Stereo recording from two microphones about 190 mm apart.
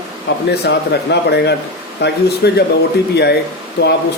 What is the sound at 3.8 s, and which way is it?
Speech, 60° left (ahead or behind).